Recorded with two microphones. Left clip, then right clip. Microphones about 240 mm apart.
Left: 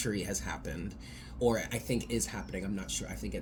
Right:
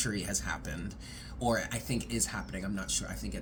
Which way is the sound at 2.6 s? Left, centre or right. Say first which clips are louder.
Right 2 dB; centre.